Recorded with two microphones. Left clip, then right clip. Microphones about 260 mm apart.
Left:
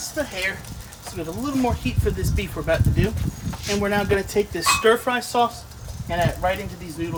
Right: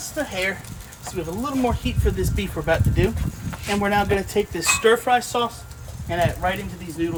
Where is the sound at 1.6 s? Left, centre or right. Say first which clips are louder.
Even; centre.